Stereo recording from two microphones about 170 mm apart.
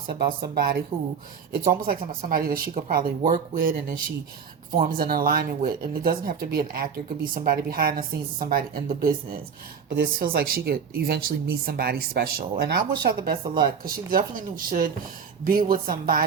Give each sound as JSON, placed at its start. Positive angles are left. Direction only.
{"t": 0.1, "sound": "speech", "side_deg": -65}
{"t": 0.9, "sound": "speech", "side_deg": -30}
{"t": 1.5, "sound": "speech", "side_deg": -60}
{"t": 4.8, "sound": "speech", "side_deg": -60}